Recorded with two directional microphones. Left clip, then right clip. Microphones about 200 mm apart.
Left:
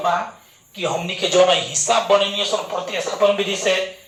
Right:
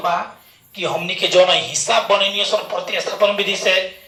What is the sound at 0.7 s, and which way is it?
Speech, 15° right (ahead or behind).